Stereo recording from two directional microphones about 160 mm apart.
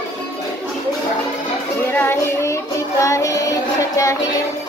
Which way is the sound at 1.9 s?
15° left (ahead or behind).